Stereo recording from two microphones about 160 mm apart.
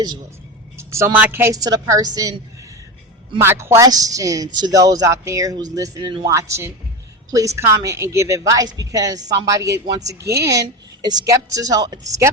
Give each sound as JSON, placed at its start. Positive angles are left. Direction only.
{"t": 0.8, "sound": "a woman's voice", "side_deg": -15}
{"t": 3.4, "sound": "a woman's voice", "side_deg": -20}